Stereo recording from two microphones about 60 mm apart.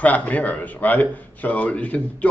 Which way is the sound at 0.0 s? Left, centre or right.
Left.